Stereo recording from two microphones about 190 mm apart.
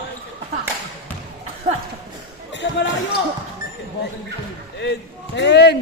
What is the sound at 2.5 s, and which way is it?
Basketball bounce, 70° left (ahead or behind).